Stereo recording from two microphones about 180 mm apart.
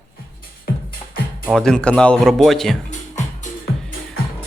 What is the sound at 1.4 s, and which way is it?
Speech, 5° left (ahead or behind).